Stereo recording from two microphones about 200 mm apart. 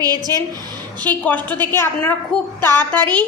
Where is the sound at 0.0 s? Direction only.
20° right (ahead or behind).